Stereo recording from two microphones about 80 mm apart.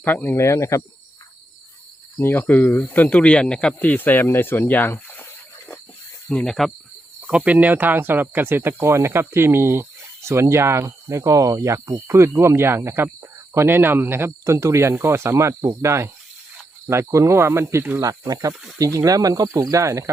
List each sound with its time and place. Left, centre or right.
0.0 s speech: left
0.3 s speech: left
2.1 s speech: left
6.2 s speech: centre
7.3 s speech: centre; by 17.8 s right
18.0 s speech: right